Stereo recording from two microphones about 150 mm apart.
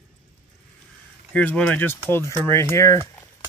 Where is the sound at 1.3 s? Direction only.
10° left (ahead or behind).